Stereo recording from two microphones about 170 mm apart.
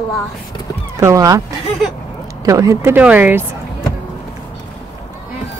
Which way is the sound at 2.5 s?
20° right (ahead or behind).